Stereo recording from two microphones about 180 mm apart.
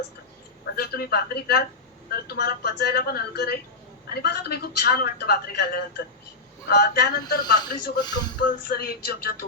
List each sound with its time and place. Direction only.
0.8 s a woman's voice: 60° left (ahead or behind)
7.9 s speech: 25° left (ahead or behind)
8.7 s a woman's voice: 55° left (ahead or behind)